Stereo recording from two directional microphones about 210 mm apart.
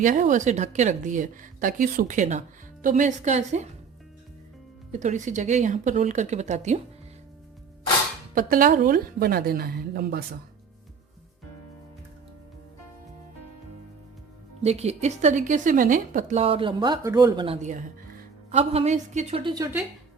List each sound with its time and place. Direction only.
0.0 s speech: 40° right (ahead or behind)
4.9 s speech: 35° right (ahead or behind)
8.4 s a woman's voice: 40° right (ahead or behind)
14.6 s a woman's voice: 30° right (ahead or behind)